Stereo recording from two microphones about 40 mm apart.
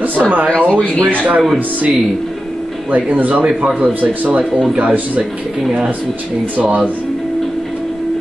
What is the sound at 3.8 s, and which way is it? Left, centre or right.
Speech, right.